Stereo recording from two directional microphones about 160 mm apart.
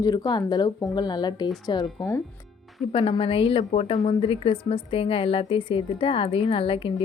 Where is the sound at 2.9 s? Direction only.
35° left (ahead or behind).